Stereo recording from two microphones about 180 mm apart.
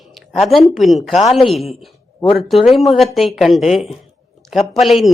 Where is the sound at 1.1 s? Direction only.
35° left (ahead or behind).